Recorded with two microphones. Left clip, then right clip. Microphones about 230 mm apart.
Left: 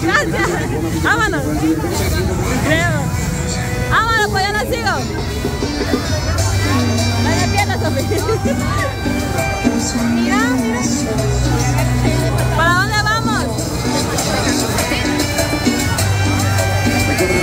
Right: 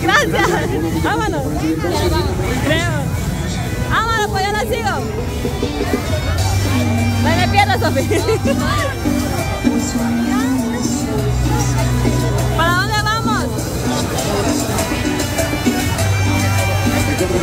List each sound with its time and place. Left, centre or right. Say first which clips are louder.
0.0 s a sound: right 2 dB; right
1.0 s music: left 5 dB; centre
3.9 s music: left 2 dB; centre
7.2 s music: right 5 dB; centre
12.5 s music: left 2 dB; centre